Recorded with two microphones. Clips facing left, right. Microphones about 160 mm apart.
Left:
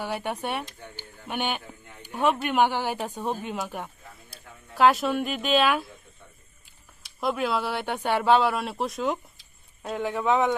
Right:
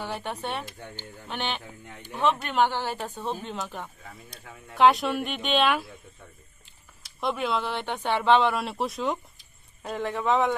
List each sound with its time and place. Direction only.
0.0 s speech: 10° left (ahead or behind)
7.0 s speech: centre (ahead or behind)